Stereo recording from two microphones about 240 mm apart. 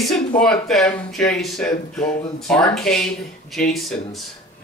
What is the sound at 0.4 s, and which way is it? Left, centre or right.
Speech, centre.